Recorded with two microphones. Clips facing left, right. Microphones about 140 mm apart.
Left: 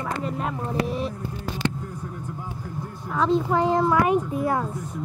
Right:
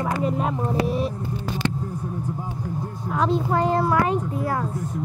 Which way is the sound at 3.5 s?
15° left (ahead or behind).